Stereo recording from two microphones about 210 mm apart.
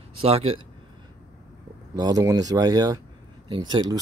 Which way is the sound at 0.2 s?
30° right (ahead or behind).